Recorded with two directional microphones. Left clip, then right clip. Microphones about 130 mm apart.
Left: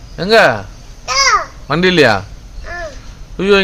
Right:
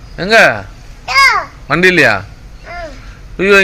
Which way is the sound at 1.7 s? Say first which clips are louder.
Right 2 dB; 25° left (ahead or behind).